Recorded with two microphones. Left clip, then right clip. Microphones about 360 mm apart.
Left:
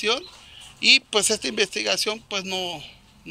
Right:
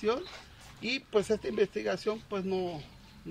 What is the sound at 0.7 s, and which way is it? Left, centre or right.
Speech, left.